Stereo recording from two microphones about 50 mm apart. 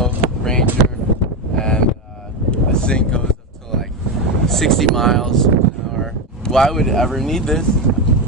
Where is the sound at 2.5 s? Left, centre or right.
Centre.